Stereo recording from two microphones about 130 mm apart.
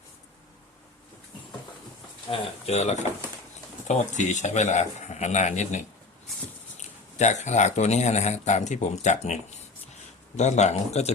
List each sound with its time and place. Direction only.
2.3 s speech: 55° left (ahead or behind)